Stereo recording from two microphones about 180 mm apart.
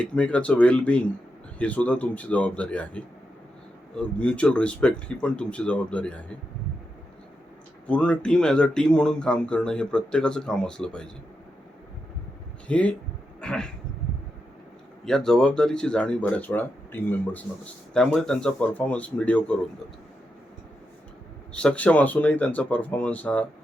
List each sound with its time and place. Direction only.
0.0 s speech: 5° left (ahead or behind)
7.9 s speech: 5° left (ahead or behind)
12.6 s speech: 5° left (ahead or behind)
13.4 s a sound: 5° left (ahead or behind)
15.0 s speech: 5° left (ahead or behind)
21.5 s speech: 5° left (ahead or behind)